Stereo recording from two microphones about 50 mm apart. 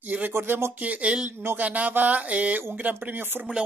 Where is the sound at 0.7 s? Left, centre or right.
Right.